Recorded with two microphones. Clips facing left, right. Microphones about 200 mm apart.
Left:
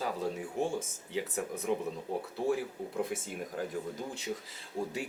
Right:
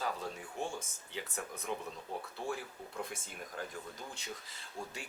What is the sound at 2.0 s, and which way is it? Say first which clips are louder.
Speech: left 7 dB; 35° left (ahead or behind).